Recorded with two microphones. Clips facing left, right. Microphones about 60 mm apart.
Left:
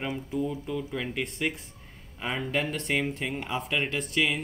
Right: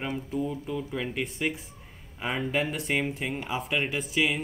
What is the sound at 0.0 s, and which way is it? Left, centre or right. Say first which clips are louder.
Speech: even; centre.